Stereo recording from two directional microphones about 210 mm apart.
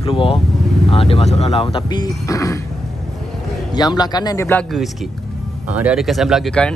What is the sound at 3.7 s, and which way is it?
Speech, 20° left (ahead or behind).